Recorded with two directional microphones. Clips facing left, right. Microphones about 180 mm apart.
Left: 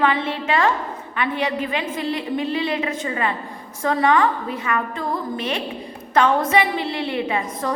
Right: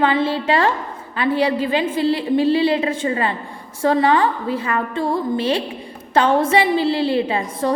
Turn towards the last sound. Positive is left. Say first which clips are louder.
# right 3 dB
turn(degrees=-30)  # may be behind; listen again after turning